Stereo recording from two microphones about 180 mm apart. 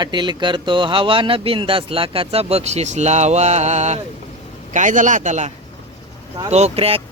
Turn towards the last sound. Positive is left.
turn(degrees=-30)  # may be behind; listen again after turning